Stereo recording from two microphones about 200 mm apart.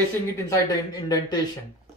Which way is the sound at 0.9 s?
20° left (ahead or behind).